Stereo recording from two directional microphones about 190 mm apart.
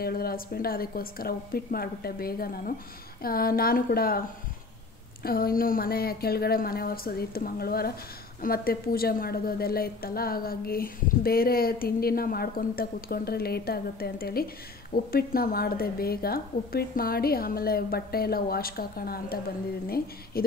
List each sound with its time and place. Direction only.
0.0 s a woman's voice: 50° left (ahead or behind)
5.2 s a woman's voice: 50° left (ahead or behind)